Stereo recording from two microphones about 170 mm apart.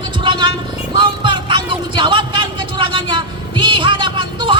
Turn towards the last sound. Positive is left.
turn(degrees=-30)  # may be behind; listen again after turning